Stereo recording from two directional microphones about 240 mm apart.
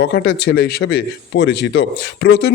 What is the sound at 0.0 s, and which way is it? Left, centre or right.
Speech, left.